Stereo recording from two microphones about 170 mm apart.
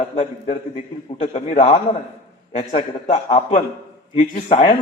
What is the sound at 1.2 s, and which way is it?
Speech, 45° left (ahead or behind).